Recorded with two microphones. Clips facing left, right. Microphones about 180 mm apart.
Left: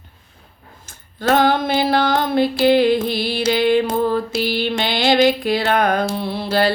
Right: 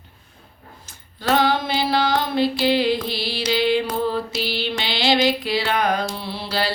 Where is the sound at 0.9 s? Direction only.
50° left (ahead or behind).